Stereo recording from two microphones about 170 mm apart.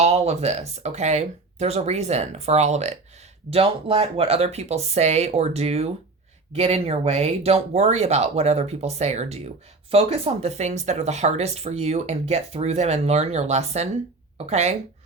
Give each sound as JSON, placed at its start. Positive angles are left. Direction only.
{"t": 0.0, "sound": "speech", "side_deg": -40}